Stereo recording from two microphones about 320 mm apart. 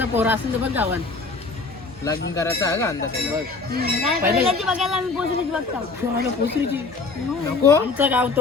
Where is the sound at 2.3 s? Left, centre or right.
Centre.